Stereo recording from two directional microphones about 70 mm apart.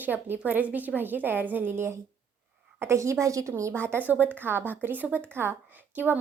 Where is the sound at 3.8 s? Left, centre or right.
Right.